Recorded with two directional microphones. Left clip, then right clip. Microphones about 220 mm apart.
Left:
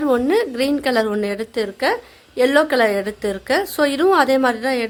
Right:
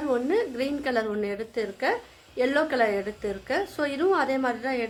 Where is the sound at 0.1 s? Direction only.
50° left (ahead or behind).